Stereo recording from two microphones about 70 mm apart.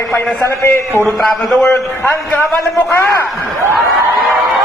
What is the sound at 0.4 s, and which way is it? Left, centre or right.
Speech, left.